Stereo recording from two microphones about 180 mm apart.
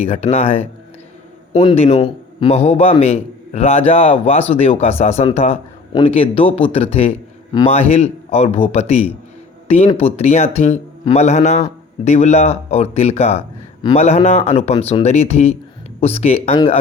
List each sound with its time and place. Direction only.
0.0 s a man's voice: 35° left (ahead or behind)